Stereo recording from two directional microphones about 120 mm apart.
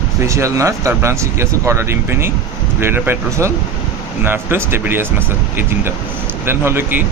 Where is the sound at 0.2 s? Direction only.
25° right (ahead or behind).